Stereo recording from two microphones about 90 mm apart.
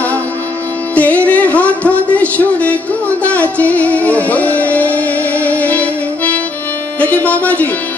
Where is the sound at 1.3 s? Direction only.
15° left (ahead or behind).